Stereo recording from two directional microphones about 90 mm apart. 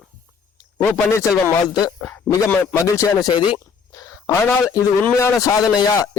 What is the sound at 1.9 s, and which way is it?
Speech, 20° left (ahead or behind).